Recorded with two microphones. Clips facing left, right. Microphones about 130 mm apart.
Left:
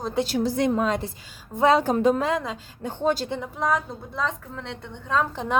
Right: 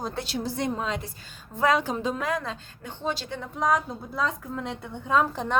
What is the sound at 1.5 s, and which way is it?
Speech, 25° left (ahead or behind).